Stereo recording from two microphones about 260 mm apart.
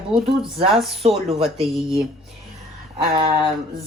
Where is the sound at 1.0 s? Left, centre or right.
Right.